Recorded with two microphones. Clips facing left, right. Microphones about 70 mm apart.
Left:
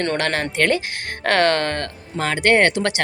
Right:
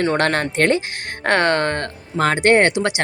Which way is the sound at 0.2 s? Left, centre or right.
Right.